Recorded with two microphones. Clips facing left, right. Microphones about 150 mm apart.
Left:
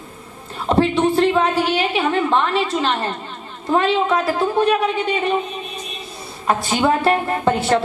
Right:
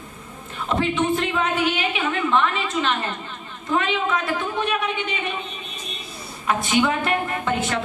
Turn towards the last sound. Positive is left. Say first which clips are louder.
# left 7 dB
turn(degrees=35)  # may be behind; listen again after turning